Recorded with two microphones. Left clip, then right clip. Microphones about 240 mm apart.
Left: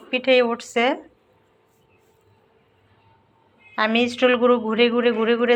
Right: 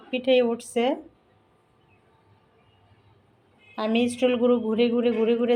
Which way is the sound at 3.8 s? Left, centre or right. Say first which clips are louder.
Left 5 dB; centre.